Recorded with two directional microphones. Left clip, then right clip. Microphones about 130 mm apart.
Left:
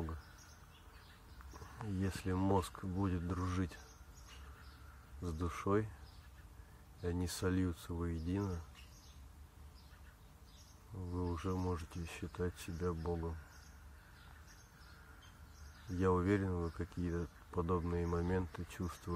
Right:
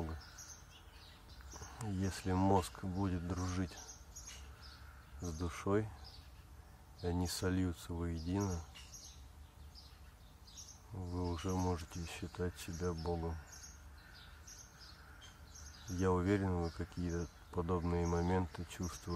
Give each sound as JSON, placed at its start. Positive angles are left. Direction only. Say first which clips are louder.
{"t": 1.5, "sound": "cricket", "louder": "right 1 dB", "side_deg": -10}
{"t": 2.5, "sound": "speech", "louder": "right 2 dB", "side_deg": -5}
{"t": 5.2, "sound": "speech", "louder": "left 1 dB", "side_deg": -5}
{"t": 7.0, "sound": "speech", "louder": "right 1 dB", "side_deg": -5}
{"t": 11.0, "sound": "speech", "louder": "even", "side_deg": 0}
{"t": 16.0, "sound": "speech", "louder": "even", "side_deg": -5}